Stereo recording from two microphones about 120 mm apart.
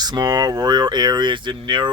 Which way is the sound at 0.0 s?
35° right (ahead or behind).